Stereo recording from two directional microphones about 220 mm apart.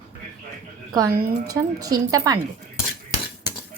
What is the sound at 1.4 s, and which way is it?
Speech, 15° right (ahead or behind).